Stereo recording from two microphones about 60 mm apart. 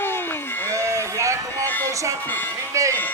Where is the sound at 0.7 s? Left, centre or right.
Right.